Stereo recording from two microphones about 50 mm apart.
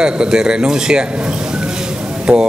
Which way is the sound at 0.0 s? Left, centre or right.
Centre.